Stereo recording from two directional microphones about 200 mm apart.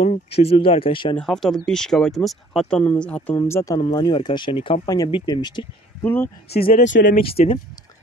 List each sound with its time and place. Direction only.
0.0 s speech: 30° left (ahead or behind)
1.1 s speech: centre (ahead or behind); by 5.7 s 20° left (ahead or behind)
6.0 s speech: 10° left (ahead or behind)
6.5 s speech: 45° left (ahead or behind)
6.9 s speech: 65° left (ahead or behind)
7.2 s speech: 30° left (ahead or behind)